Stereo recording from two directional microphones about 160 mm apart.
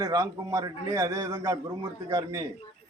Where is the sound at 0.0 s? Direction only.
20° right (ahead or behind).